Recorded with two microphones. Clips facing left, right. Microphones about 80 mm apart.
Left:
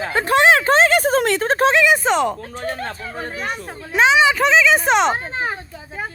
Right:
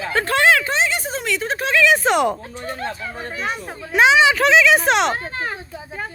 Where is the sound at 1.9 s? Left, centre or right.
Centre.